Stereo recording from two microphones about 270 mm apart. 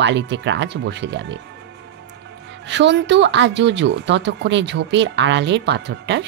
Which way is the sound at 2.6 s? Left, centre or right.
Right.